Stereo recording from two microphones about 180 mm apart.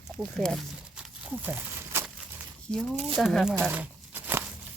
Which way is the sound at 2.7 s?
10° left (ahead or behind).